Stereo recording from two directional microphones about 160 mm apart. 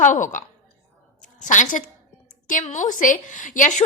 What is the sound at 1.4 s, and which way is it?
Speech, 50° left (ahead or behind).